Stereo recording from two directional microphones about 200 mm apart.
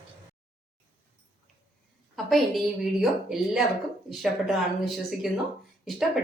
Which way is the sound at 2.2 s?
Centre (ahead or behind).